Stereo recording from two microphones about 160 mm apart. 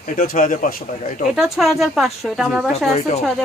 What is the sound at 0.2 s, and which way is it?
Speech, 55° left (ahead or behind).